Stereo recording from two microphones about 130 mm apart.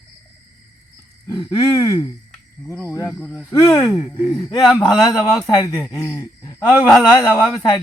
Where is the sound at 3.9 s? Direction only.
5° right (ahead or behind).